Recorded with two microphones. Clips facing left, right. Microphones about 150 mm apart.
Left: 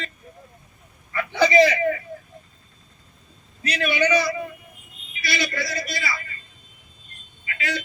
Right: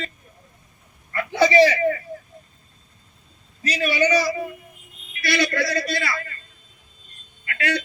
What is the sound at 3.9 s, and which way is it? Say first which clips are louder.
Speech: right 1 dB; 35° right (ahead or behind).